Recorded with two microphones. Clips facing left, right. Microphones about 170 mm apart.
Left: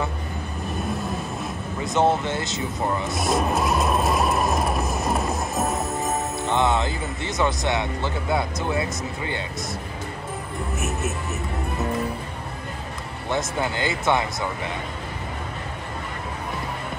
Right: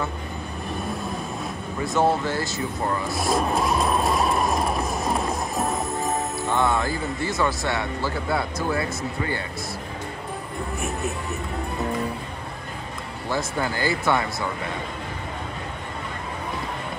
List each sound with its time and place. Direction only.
1.8 s speech: 20° left (ahead or behind)
3.2 s vehicle: centre (ahead or behind)
6.4 s speech: 20° left (ahead or behind)
10.8 s speech: centre (ahead or behind)
13.3 s speech: 20° left (ahead or behind)